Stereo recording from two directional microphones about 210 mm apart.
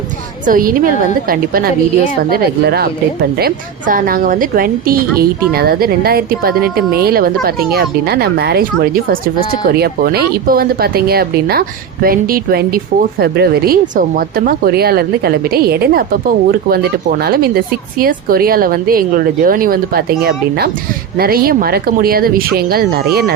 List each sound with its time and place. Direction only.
0.4 s a woman's voice: 40° right (ahead or behind)
21.2 s speech: 45° right (ahead or behind)